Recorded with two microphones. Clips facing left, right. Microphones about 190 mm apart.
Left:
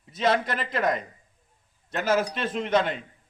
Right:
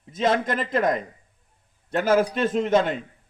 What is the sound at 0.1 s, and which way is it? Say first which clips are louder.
Speech: right 2 dB; 45° right (ahead or behind).